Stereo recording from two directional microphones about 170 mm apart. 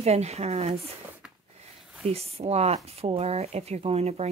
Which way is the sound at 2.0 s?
35° right (ahead or behind).